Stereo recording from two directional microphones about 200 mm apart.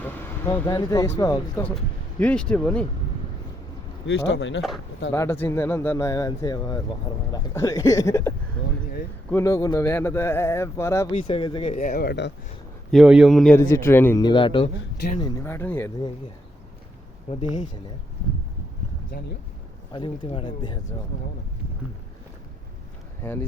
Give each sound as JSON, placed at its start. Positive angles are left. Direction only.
{"t": 0.0, "sound": "vehicle", "side_deg": 10}
{"t": 0.7, "sound": "speech", "side_deg": 20}
{"t": 1.7, "sound": "speech", "side_deg": 5}
{"t": 4.0, "sound": "speech", "side_deg": 65}
{"t": 5.1, "sound": "speech", "side_deg": 15}
{"t": 9.3, "sound": "speech", "side_deg": 15}
{"t": 11.1, "sound": "speech", "side_deg": 25}
{"t": 12.9, "sound": "a man's voice", "side_deg": -5}
{"t": 13.6, "sound": "speech", "side_deg": 15}
{"t": 15.2, "sound": "speech", "side_deg": 15}
{"t": 17.3, "sound": "speech", "side_deg": 35}
{"t": 19.9, "sound": "speech", "side_deg": 25}
{"t": 23.2, "sound": "speech", "side_deg": 10}